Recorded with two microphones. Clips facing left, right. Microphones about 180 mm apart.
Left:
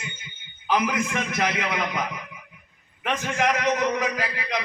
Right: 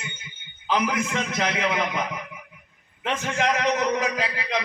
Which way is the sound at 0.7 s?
25° right (ahead or behind).